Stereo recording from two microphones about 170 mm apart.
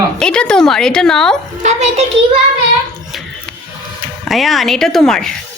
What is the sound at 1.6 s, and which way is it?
Speech, 45° right (ahead or behind).